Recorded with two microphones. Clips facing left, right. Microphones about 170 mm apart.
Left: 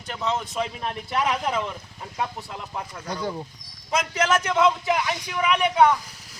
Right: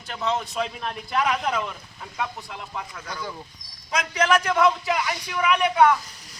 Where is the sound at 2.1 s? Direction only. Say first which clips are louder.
Left 1 dB; 35° left (ahead or behind).